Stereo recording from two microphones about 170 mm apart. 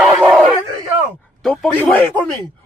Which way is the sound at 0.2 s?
Centre (ahead or behind).